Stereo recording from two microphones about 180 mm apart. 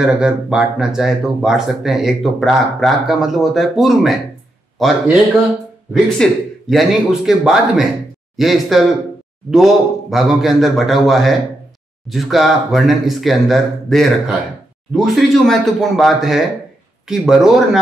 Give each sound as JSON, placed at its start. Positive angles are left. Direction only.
{"t": 0.0, "sound": "speech", "side_deg": -5}